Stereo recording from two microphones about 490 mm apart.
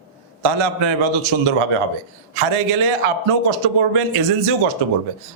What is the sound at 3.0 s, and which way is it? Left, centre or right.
Speech, right.